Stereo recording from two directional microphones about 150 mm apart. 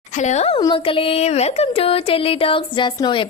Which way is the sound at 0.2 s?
50° left (ahead or behind).